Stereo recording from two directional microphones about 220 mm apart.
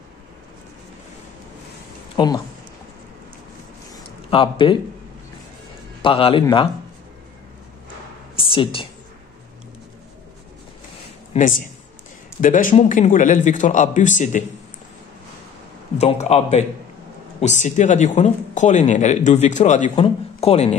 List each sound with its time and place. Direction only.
2.1 s speech: 20° left (ahead or behind)
3.9 s a sound: 25° left (ahead or behind)
6.0 s a man's voice: 25° left (ahead or behind)
8.4 s a sound: 25° left (ahead or behind)
11.3 s speech: 35° left (ahead or behind)
16.0 s speech: 30° left (ahead or behind)